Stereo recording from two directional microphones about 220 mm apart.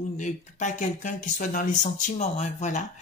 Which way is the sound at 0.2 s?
35° left (ahead or behind).